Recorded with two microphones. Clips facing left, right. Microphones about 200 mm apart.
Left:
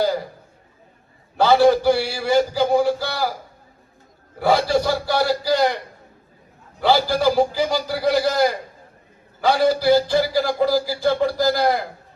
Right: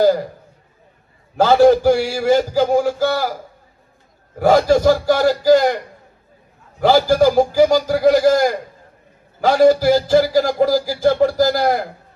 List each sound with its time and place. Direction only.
1.4 s a man's voice: 45° right (ahead or behind)
4.4 s a man's voice: 45° right (ahead or behind)